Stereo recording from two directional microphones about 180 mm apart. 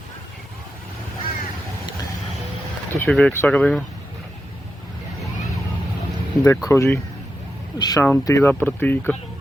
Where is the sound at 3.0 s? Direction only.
5° left (ahead or behind).